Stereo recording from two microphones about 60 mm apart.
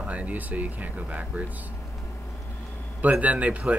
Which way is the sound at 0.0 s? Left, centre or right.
Right.